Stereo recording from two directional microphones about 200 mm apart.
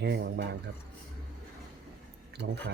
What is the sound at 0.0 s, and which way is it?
Speech, 60° right (ahead or behind).